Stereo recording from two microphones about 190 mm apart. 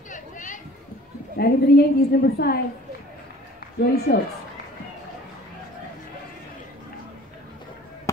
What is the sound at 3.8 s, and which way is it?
Speech, 55° left (ahead or behind).